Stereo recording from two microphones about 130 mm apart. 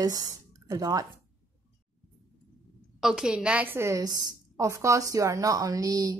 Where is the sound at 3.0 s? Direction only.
5° right (ahead or behind).